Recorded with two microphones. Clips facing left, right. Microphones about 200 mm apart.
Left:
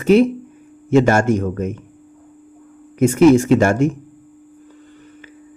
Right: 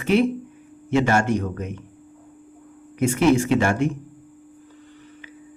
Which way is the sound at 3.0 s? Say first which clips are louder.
Left 7 dB; 45° left (ahead or behind).